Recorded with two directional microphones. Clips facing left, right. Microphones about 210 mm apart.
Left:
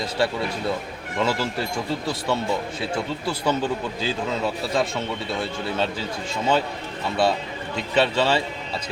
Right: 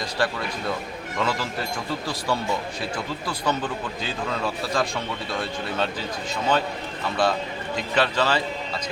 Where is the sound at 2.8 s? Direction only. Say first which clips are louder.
Left 3 dB; 25° left (ahead or behind).